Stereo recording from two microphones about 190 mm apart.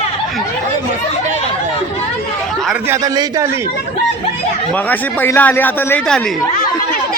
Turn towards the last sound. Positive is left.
turn(degrees=5)  # may be behind; listen again after turning